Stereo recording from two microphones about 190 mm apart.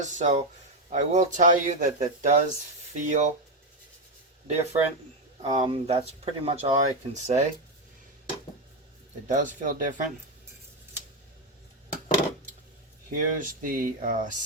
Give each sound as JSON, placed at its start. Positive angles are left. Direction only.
{"t": 0.0, "sound": "speech", "side_deg": -40}
{"t": 4.4, "sound": "speech", "side_deg": -35}
{"t": 9.2, "sound": "speech", "side_deg": -40}
{"t": 13.1, "sound": "speech", "side_deg": -45}